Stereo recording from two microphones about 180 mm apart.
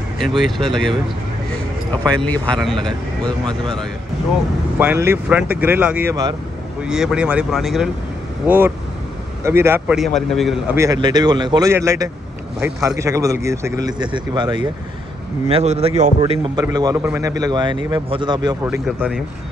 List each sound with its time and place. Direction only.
0.2 s speech: centre (ahead or behind)
2.2 s speech: 5° left (ahead or behind)
4.7 s speech: 15° right (ahead or behind)
9.9 s speech: centre (ahead or behind)
10.8 s speech: 20° right (ahead or behind)
15.4 s a man's voice: 35° right (ahead or behind)
16.5 s speech: 20° right (ahead or behind)
17.4 s speech: 25° right (ahead or behind)